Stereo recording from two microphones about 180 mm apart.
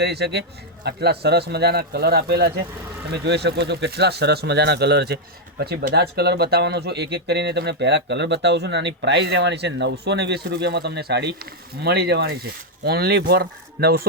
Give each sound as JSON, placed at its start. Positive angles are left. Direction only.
{"t": 0.0, "sound": "speech", "side_deg": -65}